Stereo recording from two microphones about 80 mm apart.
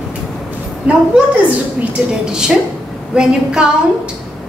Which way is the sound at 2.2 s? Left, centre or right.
Centre.